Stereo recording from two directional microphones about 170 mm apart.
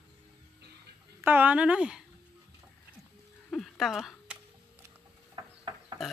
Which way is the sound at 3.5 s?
Centre (ahead or behind).